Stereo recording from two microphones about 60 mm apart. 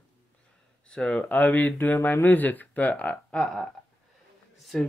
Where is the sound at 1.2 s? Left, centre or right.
Left.